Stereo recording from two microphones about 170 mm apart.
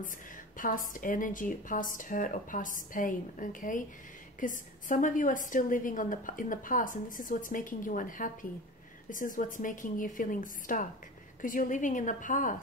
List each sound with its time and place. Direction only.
0.6 s a woman's voice: 50° left (ahead or behind)